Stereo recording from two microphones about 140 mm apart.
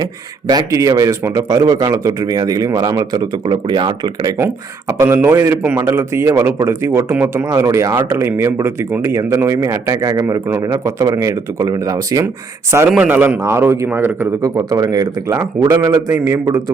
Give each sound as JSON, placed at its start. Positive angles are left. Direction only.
{"t": 0.0, "sound": "a man's voice", "side_deg": -30}
{"t": 12.9, "sound": "a man's voice", "side_deg": -10}